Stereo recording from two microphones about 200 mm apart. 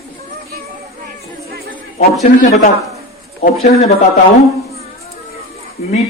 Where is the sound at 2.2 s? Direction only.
40° left (ahead or behind).